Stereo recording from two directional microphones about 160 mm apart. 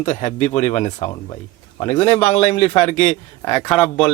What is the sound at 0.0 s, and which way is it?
A man's voice, 50° left (ahead or behind).